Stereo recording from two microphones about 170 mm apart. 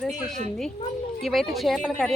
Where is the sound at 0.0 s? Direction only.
Centre (ahead or behind).